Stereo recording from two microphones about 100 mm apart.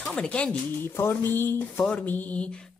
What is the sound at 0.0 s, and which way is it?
Speech, 10° left (ahead or behind).